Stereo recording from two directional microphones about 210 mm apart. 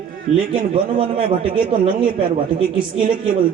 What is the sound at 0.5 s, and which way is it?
Speech, 25° right (ahead or behind).